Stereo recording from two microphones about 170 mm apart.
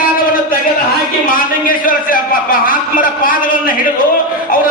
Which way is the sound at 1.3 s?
55° left (ahead or behind).